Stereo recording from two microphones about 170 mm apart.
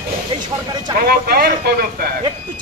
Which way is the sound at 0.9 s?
60° right (ahead or behind).